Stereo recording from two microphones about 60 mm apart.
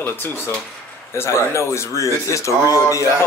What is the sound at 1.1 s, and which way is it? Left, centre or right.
Speech, left.